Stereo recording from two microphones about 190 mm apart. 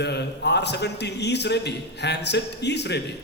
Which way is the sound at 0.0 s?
60° left (ahead or behind).